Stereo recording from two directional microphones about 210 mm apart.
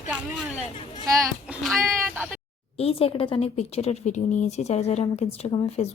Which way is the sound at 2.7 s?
30° left (ahead or behind).